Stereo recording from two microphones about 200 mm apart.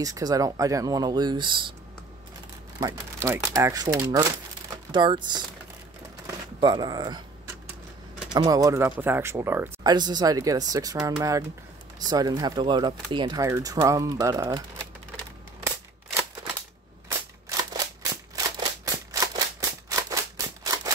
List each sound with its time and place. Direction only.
0.0 s speech: 20° right (ahead or behind)
2.8 s speech: 15° right (ahead or behind)
6.6 s speech: 20° right (ahead or behind)
8.3 s speech: 20° right (ahead or behind)
17.5 s scissors: 20° right (ahead or behind)